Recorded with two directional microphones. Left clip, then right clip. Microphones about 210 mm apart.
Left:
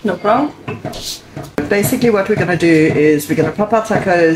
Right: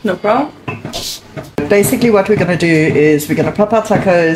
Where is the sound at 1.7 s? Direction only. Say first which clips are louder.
Right 3 dB; 35° right (ahead or behind).